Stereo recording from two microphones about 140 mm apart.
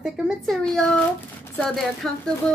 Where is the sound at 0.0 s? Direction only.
5° left (ahead or behind).